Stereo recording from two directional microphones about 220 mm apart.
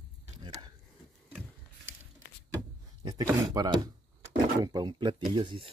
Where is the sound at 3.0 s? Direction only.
15° right (ahead or behind).